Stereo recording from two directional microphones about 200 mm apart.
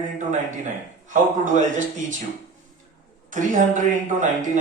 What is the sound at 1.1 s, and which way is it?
Speech, 40° right (ahead or behind).